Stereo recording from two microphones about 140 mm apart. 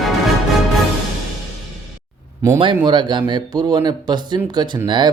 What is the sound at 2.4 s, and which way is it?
A man's voice, 20° right (ahead or behind).